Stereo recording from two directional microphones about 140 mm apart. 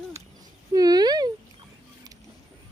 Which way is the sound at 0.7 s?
30° right (ahead or behind).